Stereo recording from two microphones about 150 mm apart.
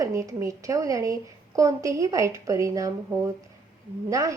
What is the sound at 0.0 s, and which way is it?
A woman's voice, 20° right (ahead or behind).